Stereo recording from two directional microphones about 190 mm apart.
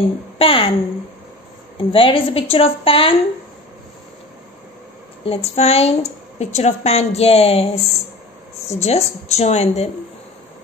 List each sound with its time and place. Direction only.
0.4 s a woman's voice: 30° left (ahead or behind)
1.8 s a woman's voice: 25° left (ahead or behind)
5.2 s a woman's voice: 30° left (ahead or behind)